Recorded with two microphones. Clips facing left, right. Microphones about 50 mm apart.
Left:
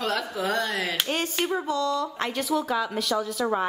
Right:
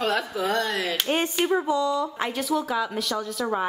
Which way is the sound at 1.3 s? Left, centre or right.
Centre.